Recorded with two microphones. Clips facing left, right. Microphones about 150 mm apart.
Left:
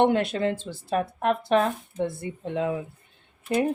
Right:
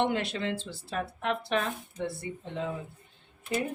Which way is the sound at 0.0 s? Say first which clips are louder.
Left 7 dB; 50° left (ahead or behind).